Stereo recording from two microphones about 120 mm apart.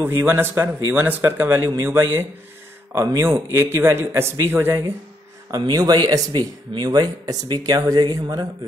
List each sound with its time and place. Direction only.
0.0 s a man's voice: 20° right (ahead or behind)
5.5 s speech: 30° right (ahead or behind)